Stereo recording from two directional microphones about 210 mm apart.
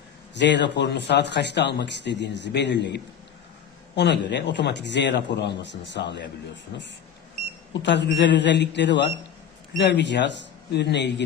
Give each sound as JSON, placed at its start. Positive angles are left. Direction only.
{"t": 0.3, "sound": "speech", "side_deg": 55}
{"t": 7.7, "sound": "speech", "side_deg": 55}